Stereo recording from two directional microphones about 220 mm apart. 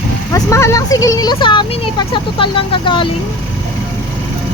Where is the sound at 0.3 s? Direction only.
15° left (ahead or behind).